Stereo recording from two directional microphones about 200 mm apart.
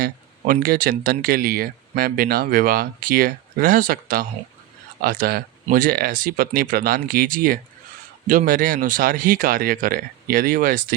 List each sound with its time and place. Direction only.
0.0 s speech: 45° right (ahead or behind)